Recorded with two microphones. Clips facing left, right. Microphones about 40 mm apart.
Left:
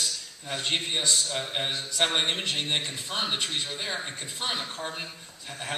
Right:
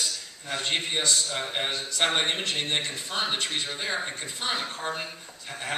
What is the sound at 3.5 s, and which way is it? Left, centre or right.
Speech, centre.